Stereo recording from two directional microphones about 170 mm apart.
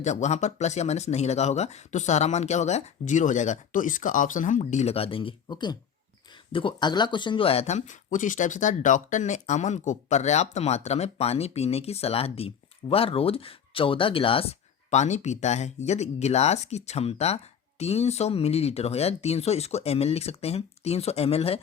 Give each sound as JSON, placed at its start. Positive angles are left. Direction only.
{"t": 0.0, "sound": "speech", "side_deg": 45}